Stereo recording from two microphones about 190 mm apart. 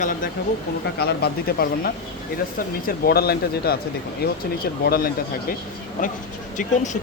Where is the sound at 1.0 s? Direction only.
55° left (ahead or behind).